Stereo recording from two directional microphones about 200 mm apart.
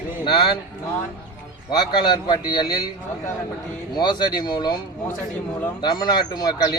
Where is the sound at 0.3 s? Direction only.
25° left (ahead or behind).